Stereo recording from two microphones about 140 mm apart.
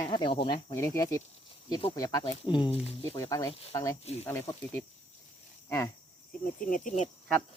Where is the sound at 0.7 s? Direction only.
20° left (ahead or behind); by 2.9 s 40° left (ahead or behind).